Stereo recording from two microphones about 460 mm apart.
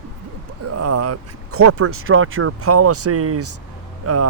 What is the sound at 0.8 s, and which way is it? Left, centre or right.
Speech, right.